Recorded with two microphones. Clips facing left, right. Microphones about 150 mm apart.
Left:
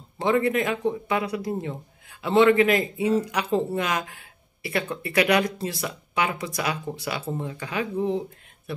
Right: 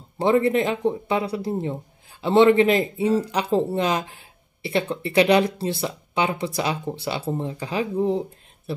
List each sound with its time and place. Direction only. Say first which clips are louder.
0.2 s speech: right 3 dB; 30° right (ahead or behind)